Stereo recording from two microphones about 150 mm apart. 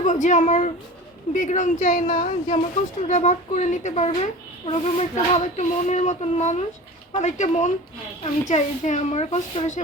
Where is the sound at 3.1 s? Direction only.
50° left (ahead or behind).